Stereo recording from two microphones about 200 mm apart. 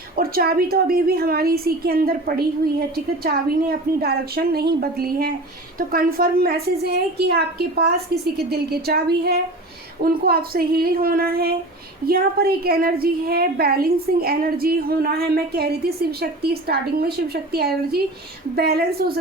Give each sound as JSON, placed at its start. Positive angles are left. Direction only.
{"t": 0.2, "sound": "a woman's voice", "side_deg": -50}